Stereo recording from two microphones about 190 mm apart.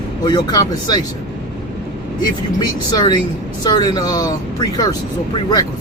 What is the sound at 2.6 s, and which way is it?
Speech, 20° left (ahead or behind).